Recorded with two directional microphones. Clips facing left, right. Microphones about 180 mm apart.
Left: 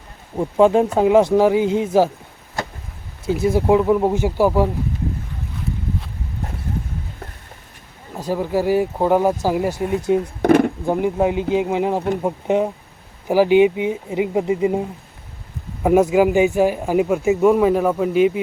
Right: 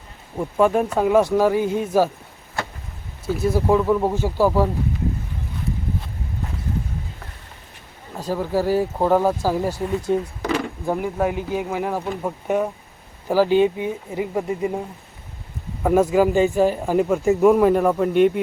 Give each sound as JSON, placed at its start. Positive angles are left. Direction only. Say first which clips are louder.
{"t": 0.3, "sound": "speech", "louder": "left 4 dB", "side_deg": 20}
{"t": 3.2, "sound": "speech", "louder": "left 3 dB", "side_deg": 15}
{"t": 8.2, "sound": "speech", "louder": "left 2 dB", "side_deg": 15}
{"t": 10.4, "sound": "a sound", "louder": "left 10 dB", "side_deg": 55}
{"t": 10.8, "sound": "speech", "louder": "left 4 dB", "side_deg": 20}